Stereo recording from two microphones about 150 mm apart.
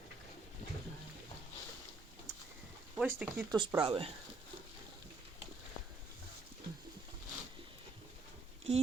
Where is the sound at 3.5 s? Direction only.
30° right (ahead or behind).